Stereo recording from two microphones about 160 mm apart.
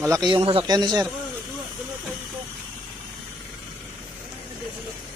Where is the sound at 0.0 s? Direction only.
25° right (ahead or behind).